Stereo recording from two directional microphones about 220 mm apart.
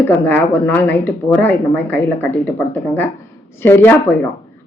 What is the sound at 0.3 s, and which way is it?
Speech, 10° left (ahead or behind).